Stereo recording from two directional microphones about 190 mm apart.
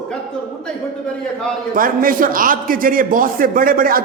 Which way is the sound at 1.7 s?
45° right (ahead or behind).